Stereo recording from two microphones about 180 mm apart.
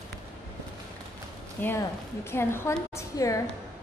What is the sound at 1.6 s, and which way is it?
A woman's voice, 15° left (ahead or behind).